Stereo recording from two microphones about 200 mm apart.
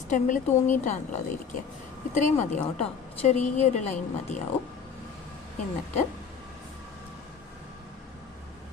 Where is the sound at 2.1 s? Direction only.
40° left (ahead or behind).